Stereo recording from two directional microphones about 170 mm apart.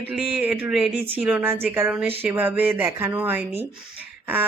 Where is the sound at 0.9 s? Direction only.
35° right (ahead or behind).